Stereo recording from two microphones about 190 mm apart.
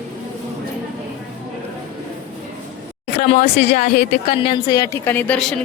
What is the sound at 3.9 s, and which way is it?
Speech, 60° left (ahead or behind).